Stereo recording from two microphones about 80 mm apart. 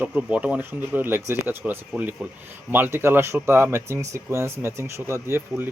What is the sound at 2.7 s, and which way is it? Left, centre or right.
Speech, right.